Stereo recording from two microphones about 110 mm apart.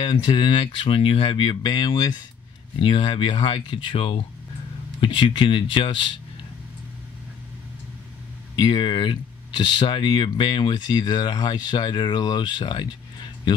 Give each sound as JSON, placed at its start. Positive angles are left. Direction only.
{"t": 0.0, "sound": "speech", "side_deg": 40}
{"t": 2.8, "sound": "speech", "side_deg": 50}
{"t": 8.5, "sound": "speech", "side_deg": 45}